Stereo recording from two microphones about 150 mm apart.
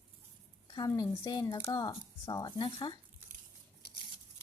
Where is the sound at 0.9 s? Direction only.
25° left (ahead or behind).